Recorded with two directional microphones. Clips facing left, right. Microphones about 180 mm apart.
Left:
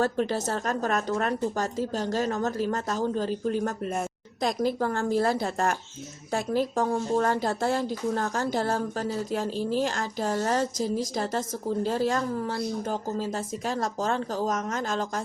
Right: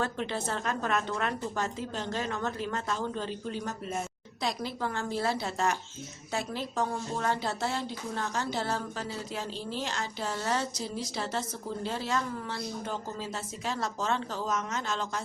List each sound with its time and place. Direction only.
0.0 s speech: 40° left (ahead or behind)